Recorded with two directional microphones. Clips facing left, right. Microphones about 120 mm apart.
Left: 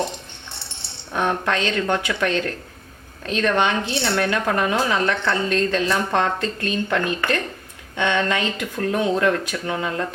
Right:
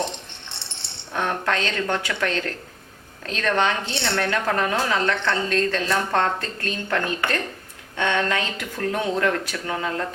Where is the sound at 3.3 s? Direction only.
15° left (ahead or behind).